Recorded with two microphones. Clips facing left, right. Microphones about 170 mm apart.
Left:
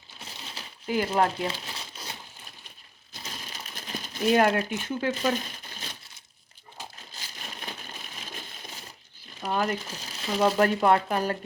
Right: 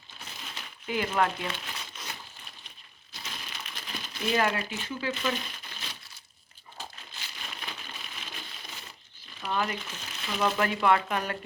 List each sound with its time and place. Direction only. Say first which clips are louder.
0.2 s crumpling: left 1 dB; 30° left (ahead or behind)
3.1 s crumpling: left 1 dB; 40° left (ahead or behind)
4.9 s speech: left 4 dB; 50° left (ahead or behind)
7.1 s a sound: left 1 dB; 40° left (ahead or behind)
9.4 s speech: left 3 dB; 40° left (ahead or behind)